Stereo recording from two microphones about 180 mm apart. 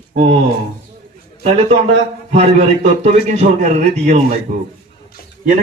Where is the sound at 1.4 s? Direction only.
35° right (ahead or behind).